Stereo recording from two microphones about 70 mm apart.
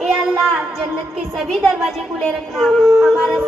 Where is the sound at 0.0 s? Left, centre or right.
Centre.